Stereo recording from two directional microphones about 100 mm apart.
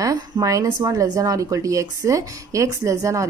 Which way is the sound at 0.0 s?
35° right (ahead or behind).